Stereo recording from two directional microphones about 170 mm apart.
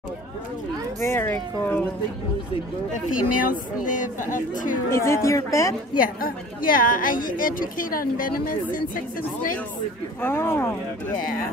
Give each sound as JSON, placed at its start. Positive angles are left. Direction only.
{"t": 1.0, "sound": "speech", "side_deg": 15}
{"t": 3.3, "sound": "a woman's voice", "side_deg": 50}
{"t": 4.8, "sound": "speech", "side_deg": 15}
{"t": 5.9, "sound": "a woman's voice", "side_deg": 55}
{"t": 10.2, "sound": "speech", "side_deg": 15}